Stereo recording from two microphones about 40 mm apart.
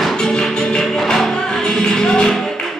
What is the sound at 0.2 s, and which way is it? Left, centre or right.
Music, centre.